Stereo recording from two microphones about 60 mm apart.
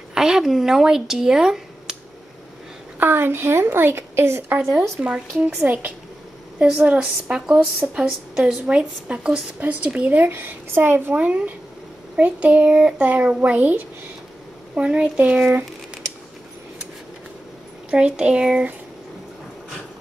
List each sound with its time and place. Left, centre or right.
0.1 s speech: centre
3.0 s speech: right
5.0 s a child's voice: centre
9.9 s speech: right
11.1 s a child's voice: right
17.9 s a woman's voice: centre